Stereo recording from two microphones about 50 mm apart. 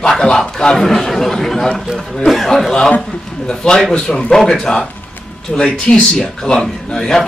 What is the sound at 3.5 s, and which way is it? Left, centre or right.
A man's voice, centre.